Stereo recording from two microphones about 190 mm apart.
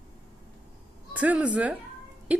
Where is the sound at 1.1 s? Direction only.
5° right (ahead or behind).